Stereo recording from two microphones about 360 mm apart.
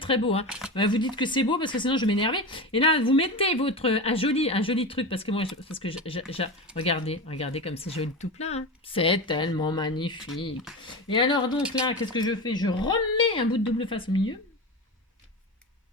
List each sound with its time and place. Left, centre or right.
0.0 s speech: centre
0.4 s a sound: centre
0.7 s speech: centre